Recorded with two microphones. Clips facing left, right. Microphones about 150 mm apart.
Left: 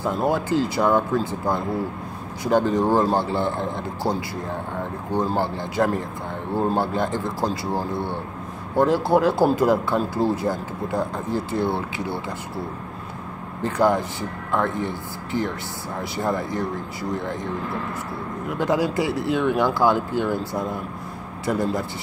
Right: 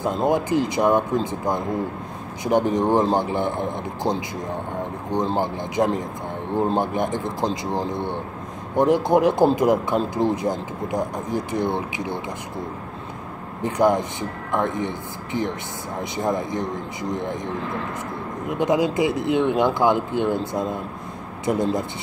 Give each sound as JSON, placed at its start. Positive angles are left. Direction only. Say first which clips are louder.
{"t": 0.0, "sound": "a man's voice", "louder": "right 1 dB", "side_deg": -20}
{"t": 5.1, "sound": "a man's voice", "louder": "even", "side_deg": -20}
{"t": 13.6, "sound": "a man's voice", "louder": "right 1 dB", "side_deg": -20}
{"t": 18.5, "sound": "a man's voice", "louder": "right 2 dB", "side_deg": -20}